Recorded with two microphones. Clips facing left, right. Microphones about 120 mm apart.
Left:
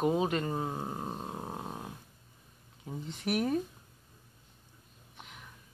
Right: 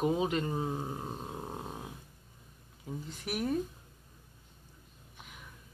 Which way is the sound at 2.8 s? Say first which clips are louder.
Left 4 dB; centre (ahead or behind).